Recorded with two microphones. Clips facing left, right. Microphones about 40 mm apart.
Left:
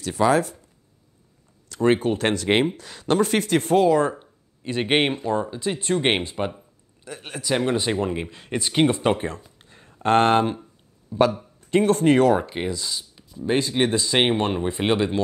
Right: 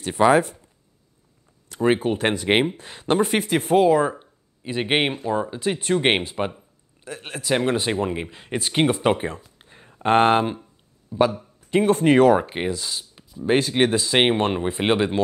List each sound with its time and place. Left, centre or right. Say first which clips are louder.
0.0 s speech: right 3 dB; right
1.8 s speech: even; centre
5.6 s speech: right 2 dB; right
6.1 s speech: right 1 dB; centre
9.6 s a sound: right 1 dB; centre
11.1 s a man's voice: even; centre; by 13.8 s right
13.8 s speech: right 2 dB; centre